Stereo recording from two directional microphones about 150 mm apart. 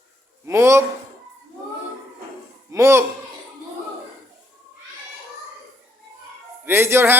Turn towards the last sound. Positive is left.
turn(degrees=-15)  # may be behind; listen again after turning